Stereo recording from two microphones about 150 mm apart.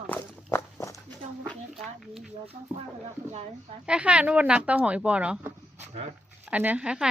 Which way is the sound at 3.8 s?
5° right (ahead or behind).